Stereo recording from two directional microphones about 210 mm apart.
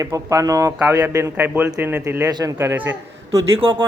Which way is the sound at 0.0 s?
15° right (ahead or behind).